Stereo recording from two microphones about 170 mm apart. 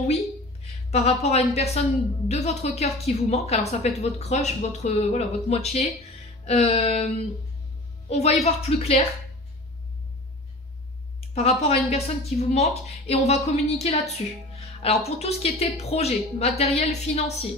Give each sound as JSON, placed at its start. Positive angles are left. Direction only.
{"t": 0.9, "sound": "a woman's voice", "side_deg": 40}
{"t": 8.1, "sound": "a woman's voice", "side_deg": 40}
{"t": 11.3, "sound": "a woman's voice", "side_deg": 35}
{"t": 14.7, "sound": "music", "side_deg": 35}
{"t": 15.0, "sound": "a woman's voice", "side_deg": 35}